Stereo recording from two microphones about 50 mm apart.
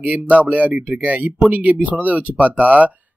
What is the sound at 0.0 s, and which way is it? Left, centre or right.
Speech, right.